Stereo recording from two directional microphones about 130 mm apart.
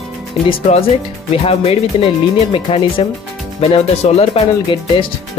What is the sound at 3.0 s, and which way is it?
Speech, 45° left (ahead or behind).